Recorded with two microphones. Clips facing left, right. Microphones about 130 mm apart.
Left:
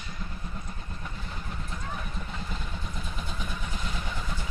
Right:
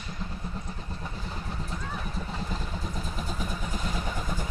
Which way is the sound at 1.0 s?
35° right (ahead or behind).